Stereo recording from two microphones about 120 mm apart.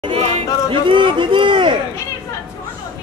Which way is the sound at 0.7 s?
45° right (ahead or behind).